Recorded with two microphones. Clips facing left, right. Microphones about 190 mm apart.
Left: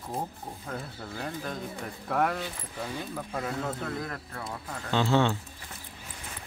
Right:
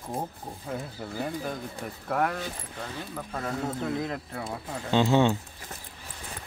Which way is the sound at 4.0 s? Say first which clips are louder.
Right 4 dB; 20° right (ahead or behind).